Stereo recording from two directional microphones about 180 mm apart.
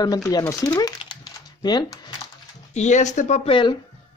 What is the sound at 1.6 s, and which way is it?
Speech, 25° left (ahead or behind).